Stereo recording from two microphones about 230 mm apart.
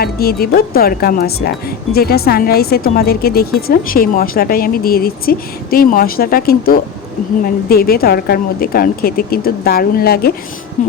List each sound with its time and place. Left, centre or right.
0.0 s speech: left